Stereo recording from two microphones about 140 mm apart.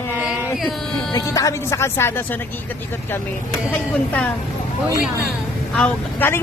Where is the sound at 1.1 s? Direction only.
25° left (ahead or behind).